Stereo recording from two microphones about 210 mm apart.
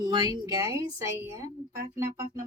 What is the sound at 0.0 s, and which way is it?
Speech, 20° right (ahead or behind).